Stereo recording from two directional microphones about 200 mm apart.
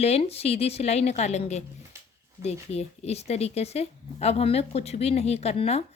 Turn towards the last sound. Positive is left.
turn(degrees=30)  # may be behind; listen again after turning